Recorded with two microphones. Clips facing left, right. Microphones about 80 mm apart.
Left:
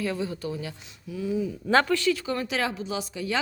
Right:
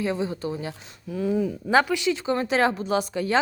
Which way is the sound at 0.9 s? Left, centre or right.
Right.